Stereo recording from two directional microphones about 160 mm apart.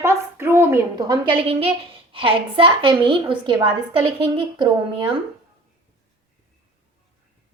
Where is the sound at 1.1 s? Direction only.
30° right (ahead or behind).